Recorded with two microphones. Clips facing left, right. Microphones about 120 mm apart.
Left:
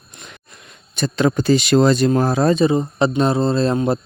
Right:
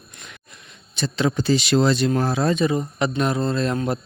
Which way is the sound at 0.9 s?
50° left (ahead or behind).